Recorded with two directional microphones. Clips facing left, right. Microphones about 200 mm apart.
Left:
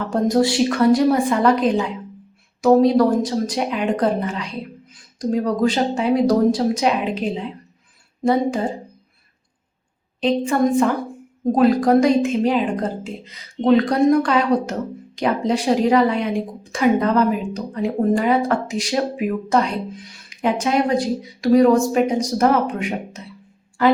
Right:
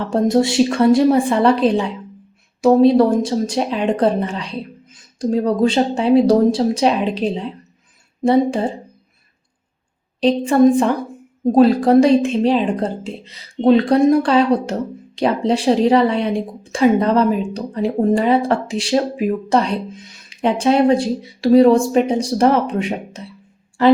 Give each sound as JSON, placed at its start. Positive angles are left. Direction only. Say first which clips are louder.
{"t": 0.1, "sound": "speech", "louder": "right 2 dB", "side_deg": -25}
{"t": 10.2, "sound": "a woman's voice", "louder": "right 5 dB", "side_deg": -35}